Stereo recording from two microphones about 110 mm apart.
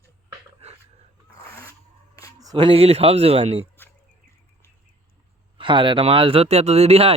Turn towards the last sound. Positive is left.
turn(degrees=-70)  # may be behind; listen again after turning